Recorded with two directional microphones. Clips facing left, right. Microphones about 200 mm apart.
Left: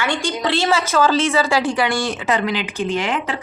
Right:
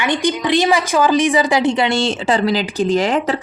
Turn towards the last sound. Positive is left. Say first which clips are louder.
# right 6 dB
turn(degrees=-40)  # may be behind; listen again after turning